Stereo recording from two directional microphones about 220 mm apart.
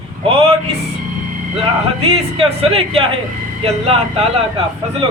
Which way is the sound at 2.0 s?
25° right (ahead or behind).